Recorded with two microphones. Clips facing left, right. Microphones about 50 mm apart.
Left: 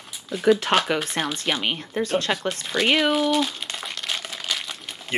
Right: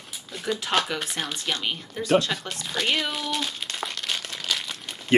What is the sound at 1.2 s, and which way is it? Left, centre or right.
Speech, left.